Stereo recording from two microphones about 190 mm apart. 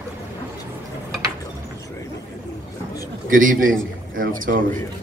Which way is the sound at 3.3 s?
45° right (ahead or behind).